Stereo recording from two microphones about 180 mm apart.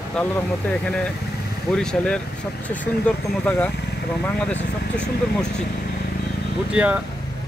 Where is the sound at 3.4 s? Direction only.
10° left (ahead or behind).